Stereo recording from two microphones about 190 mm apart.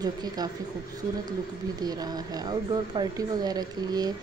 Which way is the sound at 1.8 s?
20° right (ahead or behind).